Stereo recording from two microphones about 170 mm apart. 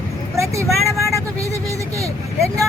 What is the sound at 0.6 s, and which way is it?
Speech, centre (ahead or behind).